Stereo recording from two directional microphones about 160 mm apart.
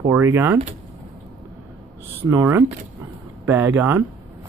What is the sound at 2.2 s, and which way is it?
Speech, 15° right (ahead or behind).